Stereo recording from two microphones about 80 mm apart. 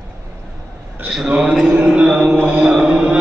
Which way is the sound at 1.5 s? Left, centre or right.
Centre.